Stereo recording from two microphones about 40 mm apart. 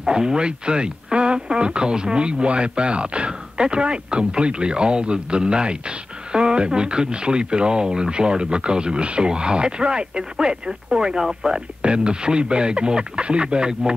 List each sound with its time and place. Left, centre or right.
0.0 s speech: centre
11.8 s speech: right